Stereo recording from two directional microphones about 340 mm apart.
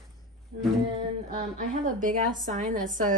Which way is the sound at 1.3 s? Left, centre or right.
Right.